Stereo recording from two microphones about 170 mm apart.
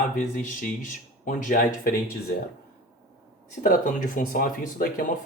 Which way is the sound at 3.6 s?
50° left (ahead or behind).